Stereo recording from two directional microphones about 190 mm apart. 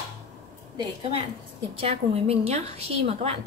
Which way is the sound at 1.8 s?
30° right (ahead or behind).